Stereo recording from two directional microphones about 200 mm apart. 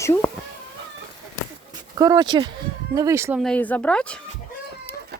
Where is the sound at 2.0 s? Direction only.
20° right (ahead or behind).